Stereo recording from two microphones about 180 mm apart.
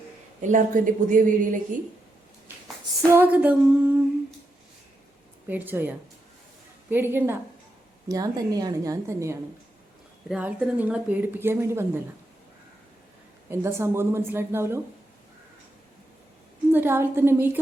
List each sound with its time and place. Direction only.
0.4 s a woman's voice: 45° right (ahead or behind)
3.1 s a woman's voice: 10° right (ahead or behind)
5.5 s a woman's voice: 10° right (ahead or behind)
6.9 s a woman's voice: 10° right (ahead or behind)
13.5 s a woman's voice: 15° right (ahead or behind)
16.7 s a woman's voice: 10° right (ahead or behind)